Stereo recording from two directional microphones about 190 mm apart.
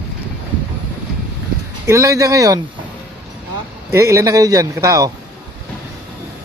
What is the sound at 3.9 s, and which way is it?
A man's voice, 15° right (ahead or behind).